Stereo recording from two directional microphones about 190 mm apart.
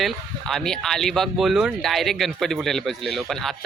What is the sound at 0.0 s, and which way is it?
Speech, centre (ahead or behind).